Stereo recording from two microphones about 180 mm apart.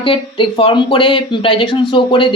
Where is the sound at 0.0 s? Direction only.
30° left (ahead or behind).